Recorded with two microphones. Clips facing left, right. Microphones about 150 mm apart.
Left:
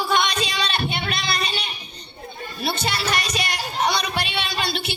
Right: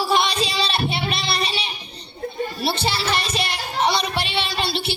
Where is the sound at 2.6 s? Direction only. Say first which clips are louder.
Even; 30° right (ahead or behind).